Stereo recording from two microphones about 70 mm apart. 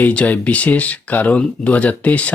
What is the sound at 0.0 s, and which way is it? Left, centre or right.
Speech, centre.